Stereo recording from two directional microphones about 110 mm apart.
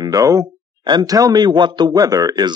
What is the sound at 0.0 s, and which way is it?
A man's voice, 30° right (ahead or behind).